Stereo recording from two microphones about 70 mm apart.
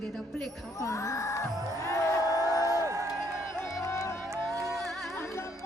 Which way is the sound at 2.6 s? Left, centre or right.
Right.